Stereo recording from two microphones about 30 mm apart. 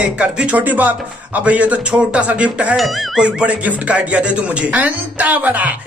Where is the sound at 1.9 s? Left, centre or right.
Right.